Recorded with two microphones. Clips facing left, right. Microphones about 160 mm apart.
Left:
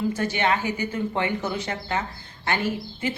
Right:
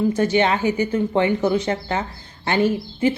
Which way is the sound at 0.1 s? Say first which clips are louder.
Right 6 dB; 20° right (ahead or behind).